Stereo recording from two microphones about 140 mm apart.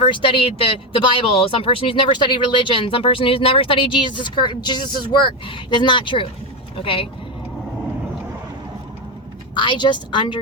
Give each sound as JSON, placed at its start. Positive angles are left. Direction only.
{"t": 0.0, "sound": "speech", "side_deg": 35}
{"t": 9.6, "sound": "speech", "side_deg": 35}